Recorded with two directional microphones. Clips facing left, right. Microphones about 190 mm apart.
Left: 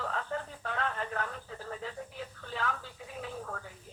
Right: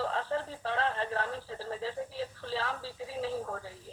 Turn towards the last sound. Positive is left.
turn(degrees=-30)  # may be behind; listen again after turning